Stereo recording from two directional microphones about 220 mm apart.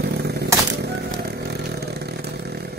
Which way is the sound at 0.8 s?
50° right (ahead or behind).